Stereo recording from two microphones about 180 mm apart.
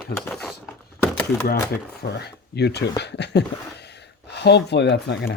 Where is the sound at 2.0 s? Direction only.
65° left (ahead or behind).